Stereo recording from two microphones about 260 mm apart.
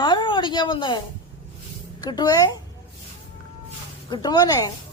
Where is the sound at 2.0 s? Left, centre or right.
Centre.